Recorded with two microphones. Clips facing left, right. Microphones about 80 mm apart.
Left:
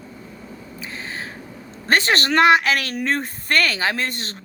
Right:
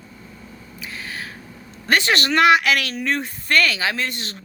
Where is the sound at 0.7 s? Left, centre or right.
Left.